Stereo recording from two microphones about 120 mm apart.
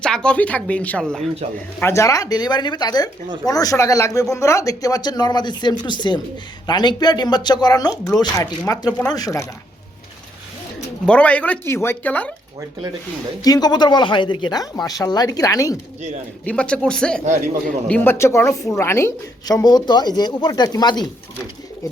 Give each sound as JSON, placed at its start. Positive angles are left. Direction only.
{"t": 0.0, "sound": "speech", "side_deg": 5}
{"t": 1.8, "sound": "speech", "side_deg": 25}
{"t": 11.0, "sound": "speech", "side_deg": 10}
{"t": 13.4, "sound": "speech", "side_deg": 35}
{"t": 16.5, "sound": "a woman's voice", "side_deg": 10}